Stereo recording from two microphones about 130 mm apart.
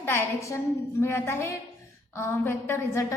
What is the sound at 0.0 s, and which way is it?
A woman's voice, 15° left (ahead or behind).